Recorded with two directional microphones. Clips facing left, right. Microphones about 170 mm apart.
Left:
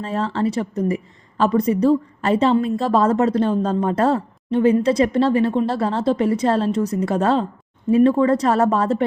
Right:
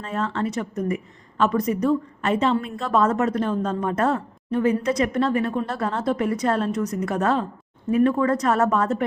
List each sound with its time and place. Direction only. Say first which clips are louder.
0.0 s a woman's voice: left 4 dB; 30° left (ahead or behind)